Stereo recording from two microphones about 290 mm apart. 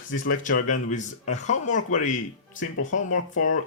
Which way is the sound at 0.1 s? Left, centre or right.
Left.